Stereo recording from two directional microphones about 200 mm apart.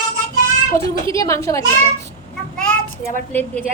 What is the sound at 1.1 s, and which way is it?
Speech, 15° left (ahead or behind).